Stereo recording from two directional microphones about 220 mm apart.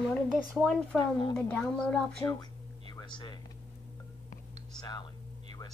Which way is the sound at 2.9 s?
20° left (ahead or behind).